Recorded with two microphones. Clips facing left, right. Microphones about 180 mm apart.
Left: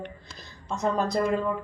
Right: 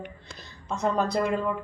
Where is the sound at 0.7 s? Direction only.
Centre (ahead or behind).